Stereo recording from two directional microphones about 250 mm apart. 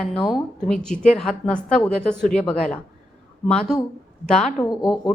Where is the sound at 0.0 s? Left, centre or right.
Centre.